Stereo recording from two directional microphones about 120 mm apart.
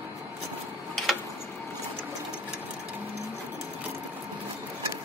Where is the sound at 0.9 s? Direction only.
Centre (ahead or behind).